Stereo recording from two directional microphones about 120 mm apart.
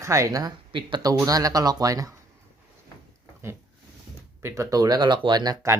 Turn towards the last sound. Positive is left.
turn(degrees=-35)  # may be behind; listen again after turning